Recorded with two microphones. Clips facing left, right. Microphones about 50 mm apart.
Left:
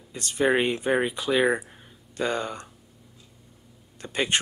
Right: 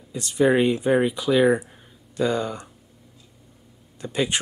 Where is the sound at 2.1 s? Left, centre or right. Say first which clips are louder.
Right 4 dB; left.